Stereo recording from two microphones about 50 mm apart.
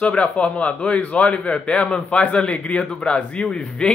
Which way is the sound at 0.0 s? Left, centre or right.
Left.